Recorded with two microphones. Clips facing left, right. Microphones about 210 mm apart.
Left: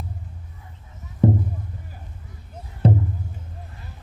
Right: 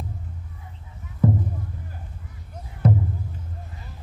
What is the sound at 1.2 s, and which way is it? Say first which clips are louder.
Music: left 3 dB; 30° left (ahead or behind).